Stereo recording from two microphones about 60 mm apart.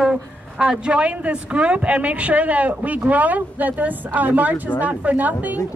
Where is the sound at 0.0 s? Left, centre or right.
Centre.